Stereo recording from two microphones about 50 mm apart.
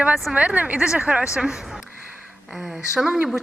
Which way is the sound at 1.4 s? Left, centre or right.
Centre.